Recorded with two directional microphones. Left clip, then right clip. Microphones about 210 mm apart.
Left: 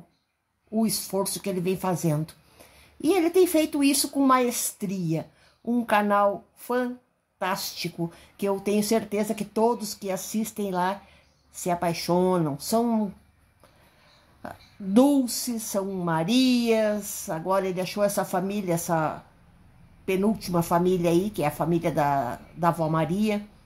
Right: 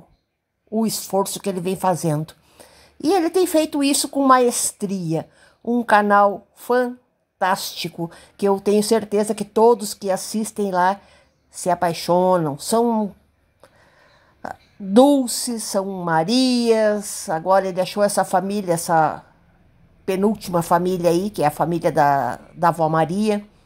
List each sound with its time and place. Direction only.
0.7 s speech: 35° right (ahead or behind)
14.4 s speech: 35° right (ahead or behind)